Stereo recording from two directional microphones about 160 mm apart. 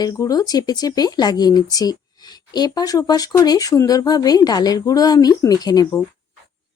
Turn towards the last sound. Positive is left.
turn(degrees=20)  # may be behind; listen again after turning